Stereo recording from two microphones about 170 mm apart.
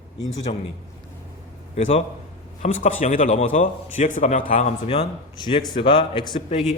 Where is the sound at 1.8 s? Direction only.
35° left (ahead or behind).